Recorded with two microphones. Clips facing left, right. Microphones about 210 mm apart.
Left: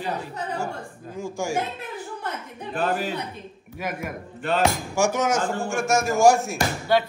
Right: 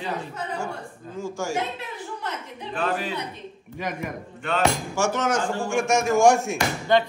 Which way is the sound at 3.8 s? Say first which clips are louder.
Even; 5° left (ahead or behind).